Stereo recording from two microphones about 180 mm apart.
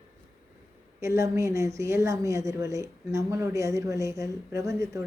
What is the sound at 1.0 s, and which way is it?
A woman's voice, 15° right (ahead or behind).